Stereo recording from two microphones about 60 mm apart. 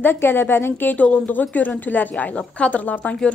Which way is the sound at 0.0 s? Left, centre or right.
Left.